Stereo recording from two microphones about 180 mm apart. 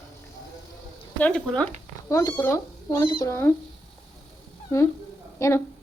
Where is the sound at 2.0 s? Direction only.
15° left (ahead or behind).